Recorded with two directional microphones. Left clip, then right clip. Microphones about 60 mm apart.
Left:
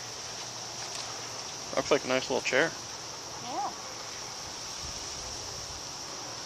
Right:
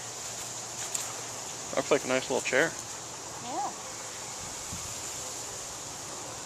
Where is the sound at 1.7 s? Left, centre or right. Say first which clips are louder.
Even; centre.